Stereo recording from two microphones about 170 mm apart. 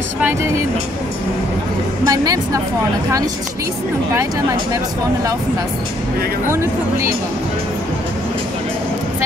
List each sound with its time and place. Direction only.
2.0 s speech: 25° right (ahead or behind)